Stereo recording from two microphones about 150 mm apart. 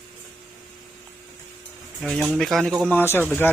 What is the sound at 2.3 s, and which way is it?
Speech, centre (ahead or behind).